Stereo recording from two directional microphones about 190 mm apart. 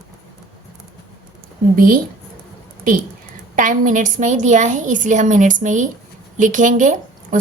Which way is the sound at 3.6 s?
45° right (ahead or behind).